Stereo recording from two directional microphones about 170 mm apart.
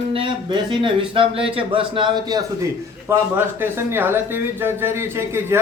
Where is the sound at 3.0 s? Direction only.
15° right (ahead or behind).